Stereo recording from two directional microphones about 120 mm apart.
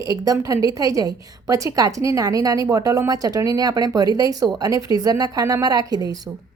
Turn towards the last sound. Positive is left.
turn(degrees=-30)  # may be behind; listen again after turning